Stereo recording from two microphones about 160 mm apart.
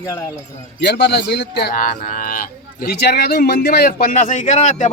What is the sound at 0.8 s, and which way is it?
Speech, 90° left.